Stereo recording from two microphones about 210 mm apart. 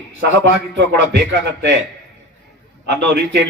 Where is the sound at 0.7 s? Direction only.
55° right (ahead or behind).